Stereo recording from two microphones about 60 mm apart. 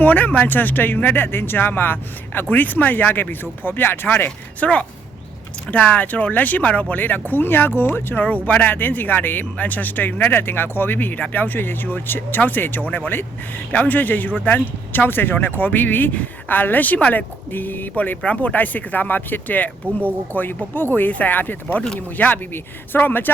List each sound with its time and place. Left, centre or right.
0.0 s speech: left
8.1 s speech: left